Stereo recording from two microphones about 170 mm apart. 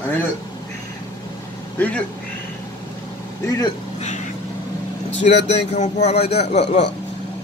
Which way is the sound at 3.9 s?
45° left (ahead or behind).